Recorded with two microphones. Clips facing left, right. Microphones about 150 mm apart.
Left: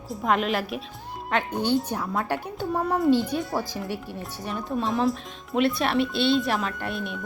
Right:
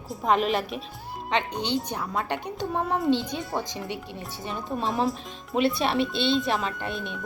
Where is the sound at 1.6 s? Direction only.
15° right (ahead or behind).